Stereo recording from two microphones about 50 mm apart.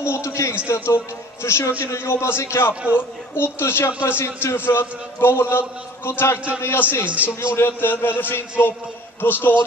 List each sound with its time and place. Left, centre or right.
0.0 s a man's voice: left
1.4 s a man's voice: left
2.4 s a man's voice: left
2.7 s a man's voice: right
3.3 s a man's voice: left
7.3 s a man's voice: left
7.6 s a man's voice: left